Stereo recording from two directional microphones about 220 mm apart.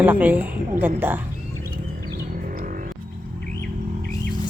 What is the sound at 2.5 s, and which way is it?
Music, 40° right (ahead or behind).